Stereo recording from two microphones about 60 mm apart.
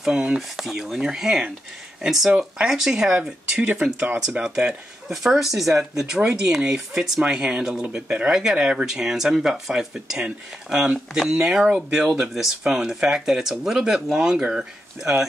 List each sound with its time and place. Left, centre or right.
0.0 s speech: centre
0.4 s speech: centre
5.1 s speech: centre; by 8.3 s right
8.3 s speech: centre